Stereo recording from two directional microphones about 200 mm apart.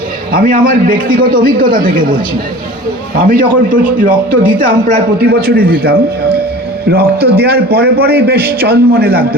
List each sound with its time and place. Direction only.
0.3 s a man's voice: 45° right (ahead or behind)
3.2 s a man's voice: 45° right (ahead or behind)